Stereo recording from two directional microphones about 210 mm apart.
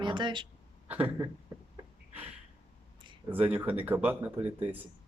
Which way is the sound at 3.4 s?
5° right (ahead or behind).